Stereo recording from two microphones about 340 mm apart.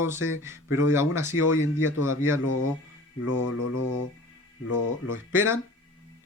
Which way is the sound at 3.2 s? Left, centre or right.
Left.